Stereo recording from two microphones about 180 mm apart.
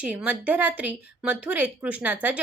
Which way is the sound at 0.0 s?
10° right (ahead or behind).